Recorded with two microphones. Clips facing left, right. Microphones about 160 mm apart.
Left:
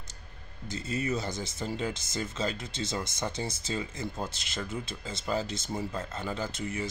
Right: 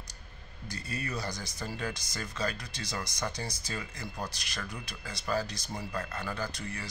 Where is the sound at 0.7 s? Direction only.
20° left (ahead or behind).